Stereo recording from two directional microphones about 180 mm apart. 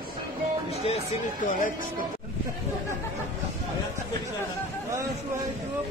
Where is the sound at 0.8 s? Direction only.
35° left (ahead or behind).